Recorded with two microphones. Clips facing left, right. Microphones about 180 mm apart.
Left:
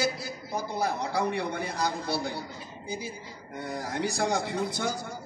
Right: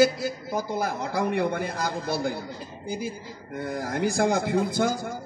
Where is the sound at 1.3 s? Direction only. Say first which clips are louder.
Right 5 dB; 50° right (ahead or behind).